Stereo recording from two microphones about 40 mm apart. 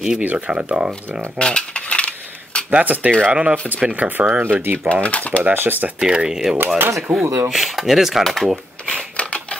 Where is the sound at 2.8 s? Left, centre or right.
Right.